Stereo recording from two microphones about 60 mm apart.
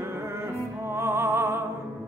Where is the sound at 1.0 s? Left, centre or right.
Right.